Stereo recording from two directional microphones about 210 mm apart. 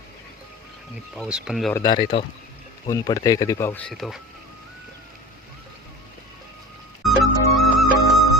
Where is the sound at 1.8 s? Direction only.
20° left (ahead or behind); by 4.1 s centre (ahead or behind).